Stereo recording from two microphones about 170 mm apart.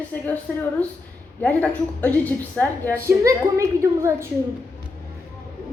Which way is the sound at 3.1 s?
15° right (ahead or behind).